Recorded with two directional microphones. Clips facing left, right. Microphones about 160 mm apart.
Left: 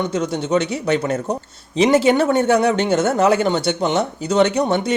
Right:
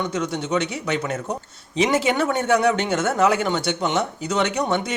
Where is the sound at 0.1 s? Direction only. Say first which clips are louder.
Left 4 dB; 30° left (ahead or behind).